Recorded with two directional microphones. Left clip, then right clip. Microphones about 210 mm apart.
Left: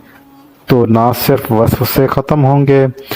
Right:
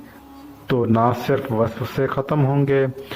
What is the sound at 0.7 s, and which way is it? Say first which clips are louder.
Speech: left 8 dB; 50° left (ahead or behind).